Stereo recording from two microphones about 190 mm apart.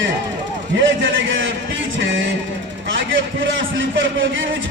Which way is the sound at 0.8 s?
80° right.